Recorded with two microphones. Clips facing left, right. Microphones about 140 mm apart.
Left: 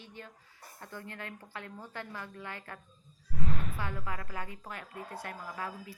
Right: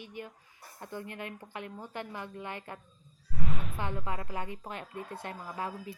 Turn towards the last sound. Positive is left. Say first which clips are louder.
# right 3 dB
turn(degrees=-25)  # may be behind; listen again after turning